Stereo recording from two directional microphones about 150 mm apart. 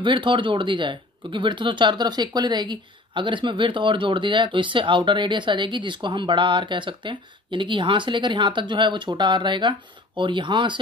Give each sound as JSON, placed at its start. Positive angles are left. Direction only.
{"t": 0.0, "sound": "speech", "side_deg": -35}